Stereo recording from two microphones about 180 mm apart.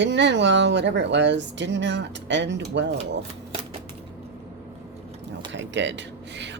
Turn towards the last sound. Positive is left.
turn(degrees=-80)